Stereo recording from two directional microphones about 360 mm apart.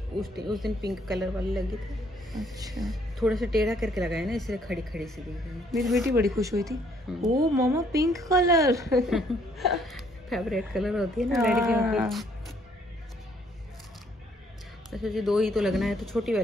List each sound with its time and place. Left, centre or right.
0.5 s speech: centre
2.7 s speech: centre
14.9 s speech: centre